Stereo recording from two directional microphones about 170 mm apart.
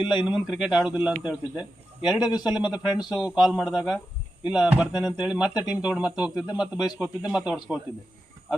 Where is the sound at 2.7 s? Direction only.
25° left (ahead or behind).